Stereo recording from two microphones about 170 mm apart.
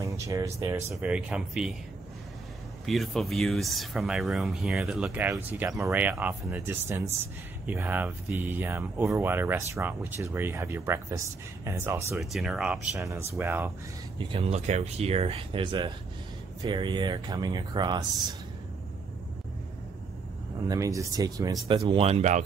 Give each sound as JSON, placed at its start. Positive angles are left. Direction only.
{"t": 0.0, "sound": "speech", "side_deg": -20}
{"t": 2.9, "sound": "speech", "side_deg": 0}
{"t": 12.2, "sound": "speech", "side_deg": 0}
{"t": 12.9, "sound": "speech", "side_deg": -15}
{"t": 14.3, "sound": "speech", "side_deg": -35}
{"t": 20.6, "sound": "speech", "side_deg": -20}